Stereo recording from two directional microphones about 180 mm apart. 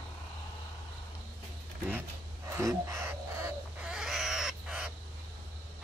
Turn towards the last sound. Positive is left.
turn(degrees=-5)  # may be behind; listen again after turning